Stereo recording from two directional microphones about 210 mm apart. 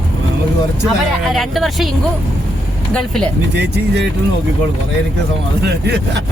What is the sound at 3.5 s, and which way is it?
Speech, 55° right (ahead or behind).